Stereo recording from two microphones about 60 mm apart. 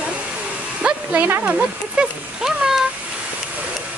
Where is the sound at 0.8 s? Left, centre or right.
Right.